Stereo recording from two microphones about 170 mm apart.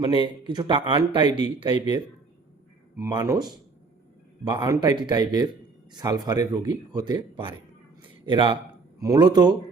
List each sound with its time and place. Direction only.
0.0 s speech: 25° right (ahead or behind)
3.1 s speech: 25° right (ahead or behind)